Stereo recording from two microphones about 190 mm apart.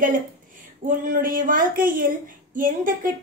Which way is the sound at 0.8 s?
45° right (ahead or behind).